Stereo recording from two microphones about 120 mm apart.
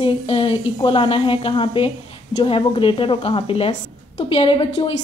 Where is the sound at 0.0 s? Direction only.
50° left (ahead or behind).